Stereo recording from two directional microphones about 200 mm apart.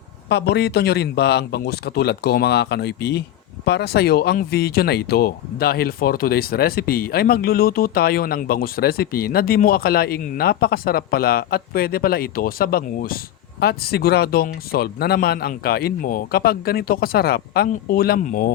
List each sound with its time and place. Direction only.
0.3 s speech: 55° left (ahead or behind)